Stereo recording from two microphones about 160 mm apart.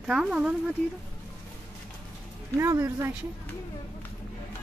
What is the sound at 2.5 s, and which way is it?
Speech, 20° right (ahead or behind).